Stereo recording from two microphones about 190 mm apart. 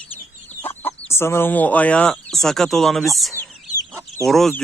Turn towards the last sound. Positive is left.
turn(degrees=0)  # may be behind; listen again after turning